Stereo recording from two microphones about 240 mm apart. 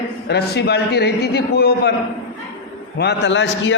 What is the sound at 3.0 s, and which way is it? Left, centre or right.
Speech, left.